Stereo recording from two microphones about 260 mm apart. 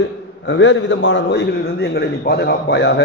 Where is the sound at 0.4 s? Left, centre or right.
Left.